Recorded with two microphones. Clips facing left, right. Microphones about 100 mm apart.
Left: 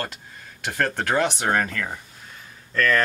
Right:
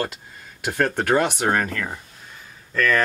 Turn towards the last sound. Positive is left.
turn(degrees=-5)  # may be behind; listen again after turning